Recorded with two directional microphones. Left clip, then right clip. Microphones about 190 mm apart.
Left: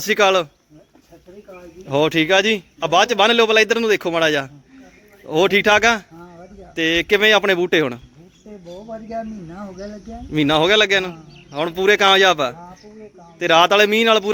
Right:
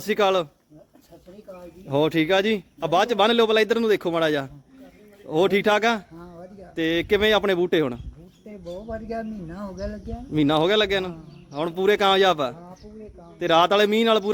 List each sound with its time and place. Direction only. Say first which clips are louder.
0.0 s speech: left 5 dB; 5° right (ahead or behind)
1.9 s a man's voice: left 5 dB; 5° right (ahead or behind)
9.0 s speech: left 3 dB; 25° right (ahead or behind)
10.3 s a man's voice: left 5 dB; 5° right (ahead or behind)